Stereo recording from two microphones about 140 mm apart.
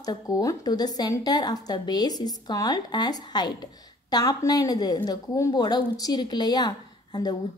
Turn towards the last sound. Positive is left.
turn(degrees=30)  # may be behind; listen again after turning